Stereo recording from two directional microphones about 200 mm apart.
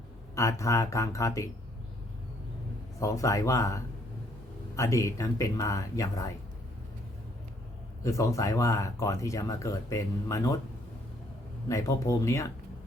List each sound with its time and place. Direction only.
0.3 s speech: 15° left (ahead or behind)
3.0 s speech: 15° left (ahead or behind)
8.0 s speech: 15° left (ahead or behind)
11.7 s speech: 15° left (ahead or behind)